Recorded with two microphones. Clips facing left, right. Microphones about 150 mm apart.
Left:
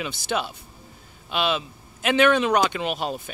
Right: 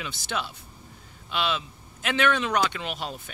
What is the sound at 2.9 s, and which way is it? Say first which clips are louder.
Speech: left 6 dB; 55° left (ahead or behind).